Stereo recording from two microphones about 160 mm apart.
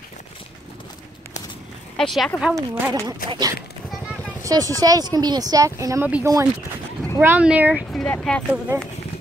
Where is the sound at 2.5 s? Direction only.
20° right (ahead or behind).